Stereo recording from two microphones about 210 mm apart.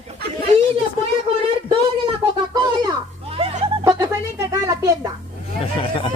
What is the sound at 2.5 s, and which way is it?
Speech, 20° right (ahead or behind).